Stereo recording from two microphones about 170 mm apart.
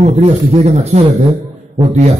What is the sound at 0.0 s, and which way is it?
A man's voice, 40° right (ahead or behind).